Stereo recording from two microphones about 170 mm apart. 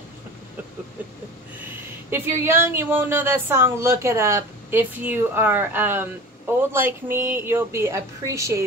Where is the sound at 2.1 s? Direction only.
15° right (ahead or behind).